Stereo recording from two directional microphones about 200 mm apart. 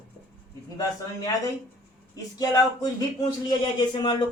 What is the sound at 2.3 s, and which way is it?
Speech, 20° left (ahead or behind).